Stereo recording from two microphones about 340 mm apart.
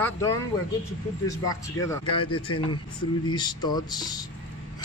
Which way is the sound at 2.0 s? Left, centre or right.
Left.